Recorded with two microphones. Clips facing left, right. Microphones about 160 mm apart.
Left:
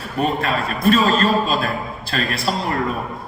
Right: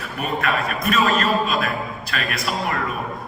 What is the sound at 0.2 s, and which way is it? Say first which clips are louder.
A man's voice: left 3 dB; 30° left (ahead or behind).